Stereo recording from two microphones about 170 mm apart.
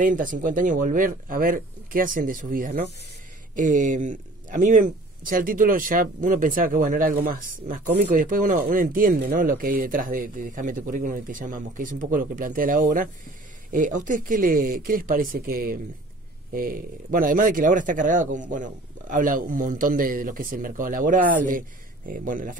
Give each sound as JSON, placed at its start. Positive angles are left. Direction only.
{"t": 0.0, "sound": "a man's voice", "side_deg": -50}